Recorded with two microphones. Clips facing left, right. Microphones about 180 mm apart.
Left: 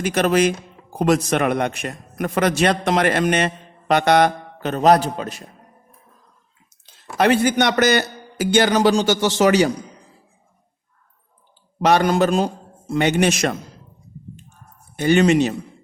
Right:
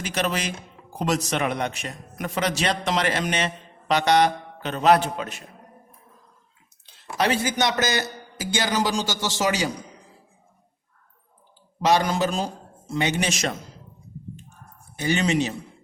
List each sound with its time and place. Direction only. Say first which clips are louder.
0.0 s a man's voice: left 9 dB; 55° left (ahead or behind); by 5.5 s 35° left (ahead or behind)
7.2 s a man's voice: left 6 dB; 55° left (ahead or behind)
11.8 s a man's voice: left 5 dB; 60° left (ahead or behind)
14.9 s a man's voice: left 8 dB; 60° left (ahead or behind)